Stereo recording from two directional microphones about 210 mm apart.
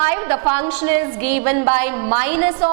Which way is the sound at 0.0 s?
10° right (ahead or behind).